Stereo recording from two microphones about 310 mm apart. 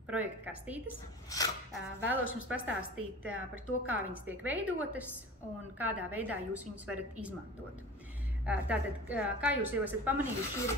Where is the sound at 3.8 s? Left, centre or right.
Centre.